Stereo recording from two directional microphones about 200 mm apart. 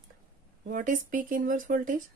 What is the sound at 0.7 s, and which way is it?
Speech, 40° right (ahead or behind).